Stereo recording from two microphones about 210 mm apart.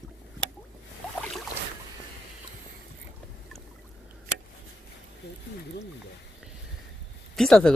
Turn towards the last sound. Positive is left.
turn(degrees=5)  # may be behind; listen again after turning